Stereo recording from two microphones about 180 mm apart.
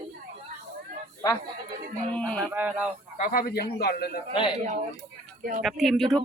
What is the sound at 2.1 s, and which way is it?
Speech, 5° left (ahead or behind).